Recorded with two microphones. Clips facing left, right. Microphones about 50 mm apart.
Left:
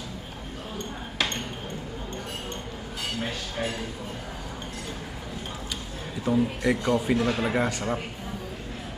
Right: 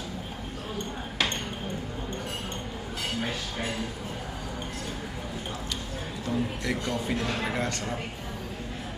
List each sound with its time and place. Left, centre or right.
6.2 s a man's voice: centre